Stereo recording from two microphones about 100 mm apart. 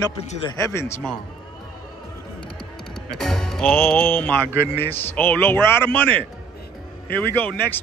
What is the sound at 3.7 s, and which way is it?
Speech, 15° left (ahead or behind).